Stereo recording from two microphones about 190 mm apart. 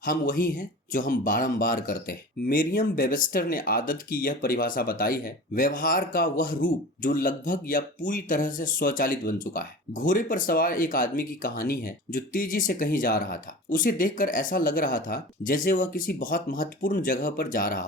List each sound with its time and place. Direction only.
0.0 s speech: 45° left (ahead or behind)